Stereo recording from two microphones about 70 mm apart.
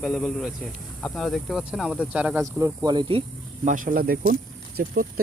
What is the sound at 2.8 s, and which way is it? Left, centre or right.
Speech, right.